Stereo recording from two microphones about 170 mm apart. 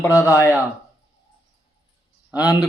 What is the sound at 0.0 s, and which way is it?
Speech, 15° left (ahead or behind).